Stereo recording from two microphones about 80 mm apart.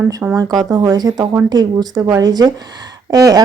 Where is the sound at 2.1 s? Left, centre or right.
Right.